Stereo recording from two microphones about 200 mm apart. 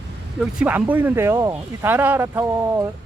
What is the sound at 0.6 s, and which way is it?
Speech, 10° right (ahead or behind).